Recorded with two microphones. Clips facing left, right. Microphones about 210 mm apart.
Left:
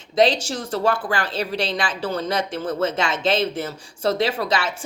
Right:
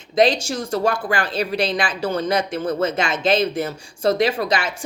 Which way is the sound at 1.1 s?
15° right (ahead or behind).